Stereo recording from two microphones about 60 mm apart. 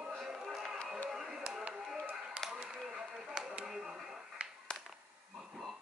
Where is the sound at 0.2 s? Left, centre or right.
Centre.